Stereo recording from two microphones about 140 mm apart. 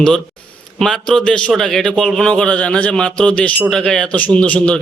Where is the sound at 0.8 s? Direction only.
5° left (ahead or behind).